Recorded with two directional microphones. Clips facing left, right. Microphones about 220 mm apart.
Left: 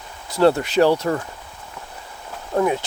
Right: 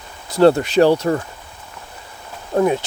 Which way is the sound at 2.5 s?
30° right (ahead or behind).